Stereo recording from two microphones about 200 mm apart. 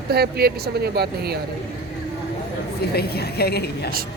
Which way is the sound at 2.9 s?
50° left (ahead or behind).